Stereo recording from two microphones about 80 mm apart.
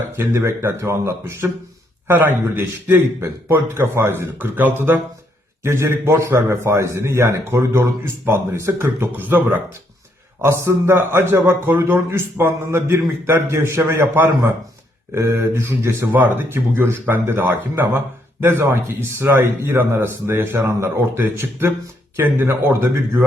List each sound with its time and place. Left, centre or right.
0.2 s a man's voice: right
5.6 s a man's voice: right
10.4 s a man's voice: right